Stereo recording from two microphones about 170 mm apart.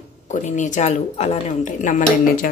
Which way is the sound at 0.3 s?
45° left (ahead or behind).